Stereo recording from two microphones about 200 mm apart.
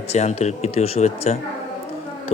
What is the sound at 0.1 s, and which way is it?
Speech, 30° left (ahead or behind).